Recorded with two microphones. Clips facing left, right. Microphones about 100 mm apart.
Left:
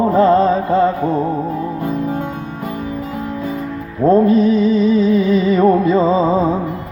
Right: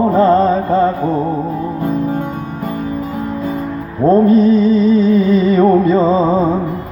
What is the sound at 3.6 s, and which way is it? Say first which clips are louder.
Music: right 3 dB; 45° right (ahead or behind).